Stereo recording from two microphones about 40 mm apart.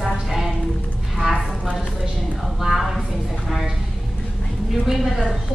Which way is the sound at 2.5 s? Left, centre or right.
Centre.